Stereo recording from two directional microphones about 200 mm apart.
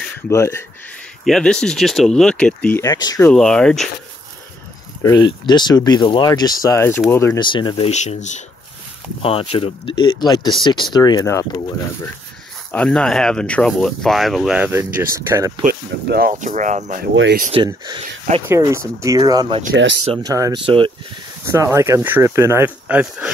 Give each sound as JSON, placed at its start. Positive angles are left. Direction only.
{"t": 0.3, "sound": "speech", "side_deg": 15}
{"t": 1.2, "sound": "speech", "side_deg": 0}
{"t": 3.3, "sound": "speech", "side_deg": 5}
{"t": 5.0, "sound": "speech", "side_deg": 20}
{"t": 7.3, "sound": "speech", "side_deg": 25}
{"t": 12.7, "sound": "speech", "side_deg": 5}
{"t": 15.6, "sound": "speech", "side_deg": -50}
{"t": 17.1, "sound": "speech", "side_deg": -70}
{"t": 17.6, "sound": "speech", "side_deg": -20}
{"t": 19.7, "sound": "speech", "side_deg": -65}
{"t": 20.2, "sound": "speech", "side_deg": -15}
{"t": 21.5, "sound": "speech", "side_deg": -15}